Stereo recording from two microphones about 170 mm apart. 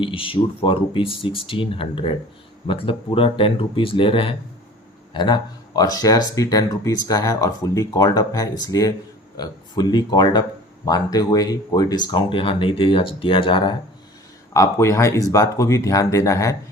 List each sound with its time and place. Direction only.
0.0 s speech: 30° left (ahead or behind)
14.5 s speech: 15° left (ahead or behind)